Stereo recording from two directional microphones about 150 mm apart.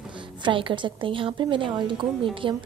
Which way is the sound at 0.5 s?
35° right (ahead or behind).